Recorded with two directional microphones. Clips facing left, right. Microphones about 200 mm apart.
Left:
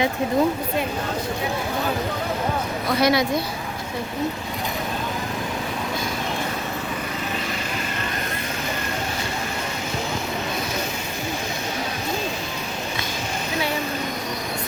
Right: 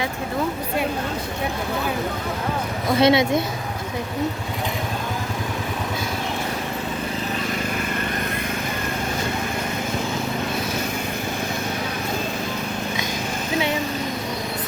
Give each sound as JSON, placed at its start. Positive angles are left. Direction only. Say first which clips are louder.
{"t": 3.0, "sound": "speech", "louder": "right 3 dB", "side_deg": -25}